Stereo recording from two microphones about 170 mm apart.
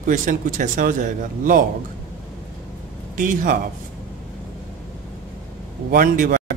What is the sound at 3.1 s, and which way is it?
Speech, 50° right (ahead or behind).